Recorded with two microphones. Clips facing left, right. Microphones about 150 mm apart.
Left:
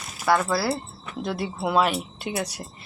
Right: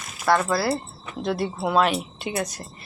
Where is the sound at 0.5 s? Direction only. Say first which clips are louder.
Right 1 dB; 5° left (ahead or behind).